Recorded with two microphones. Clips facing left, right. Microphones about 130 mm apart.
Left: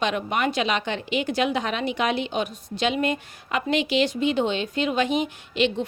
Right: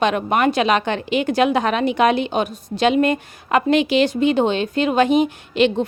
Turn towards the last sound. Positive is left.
turn(degrees=-50)  # may be behind; listen again after turning